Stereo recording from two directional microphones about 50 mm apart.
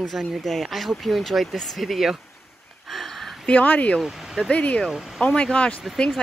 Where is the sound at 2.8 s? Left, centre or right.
Centre.